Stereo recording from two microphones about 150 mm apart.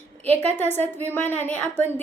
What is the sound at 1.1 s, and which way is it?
Speech, 15° left (ahead or behind).